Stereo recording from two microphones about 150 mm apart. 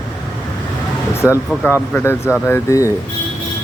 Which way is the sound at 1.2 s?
15° left (ahead or behind).